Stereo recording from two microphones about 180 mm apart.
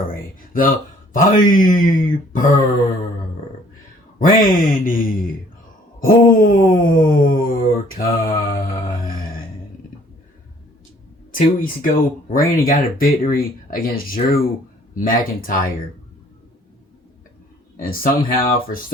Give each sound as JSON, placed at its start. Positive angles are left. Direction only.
{"t": 0.0, "sound": "speech", "side_deg": 50}
{"t": 4.2, "sound": "speech", "side_deg": 50}
{"t": 6.0, "sound": "a sound", "side_deg": 50}
{"t": 11.3, "sound": "speech", "side_deg": 50}
{"t": 17.7, "sound": "speech", "side_deg": 55}